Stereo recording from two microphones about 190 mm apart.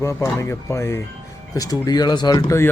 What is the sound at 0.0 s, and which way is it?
Speech, 15° left (ahead or behind).